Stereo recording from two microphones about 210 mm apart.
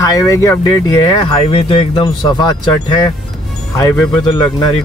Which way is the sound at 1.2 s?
25° left (ahead or behind).